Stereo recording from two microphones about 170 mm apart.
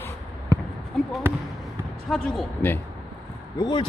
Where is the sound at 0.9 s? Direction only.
Centre (ahead or behind).